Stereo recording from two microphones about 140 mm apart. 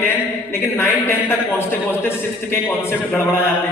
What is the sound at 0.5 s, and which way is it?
A man's voice, 20° left (ahead or behind).